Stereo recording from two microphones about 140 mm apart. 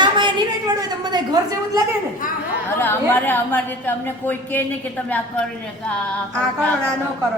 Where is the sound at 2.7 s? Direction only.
15° left (ahead or behind).